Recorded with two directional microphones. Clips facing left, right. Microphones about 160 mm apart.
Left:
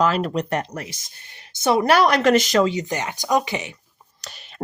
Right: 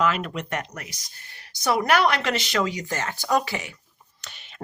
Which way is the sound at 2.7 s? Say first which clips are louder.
Left 4 dB; 20° left (ahead or behind).